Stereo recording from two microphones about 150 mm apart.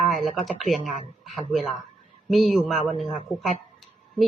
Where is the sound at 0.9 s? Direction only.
40° right (ahead or behind).